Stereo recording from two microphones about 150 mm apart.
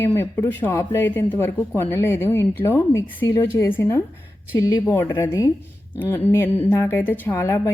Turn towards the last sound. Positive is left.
turn(degrees=15)  # may be behind; listen again after turning